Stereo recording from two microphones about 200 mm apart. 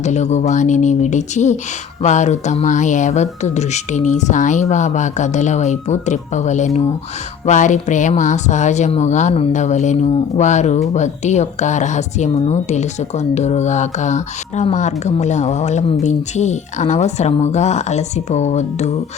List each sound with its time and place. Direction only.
0.0 s speech: 35° left (ahead or behind)